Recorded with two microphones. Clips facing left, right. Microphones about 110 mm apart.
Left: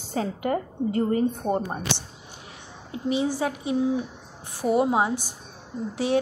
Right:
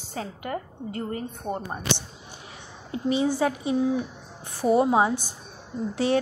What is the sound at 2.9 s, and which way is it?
A woman's voice, 5° left (ahead or behind).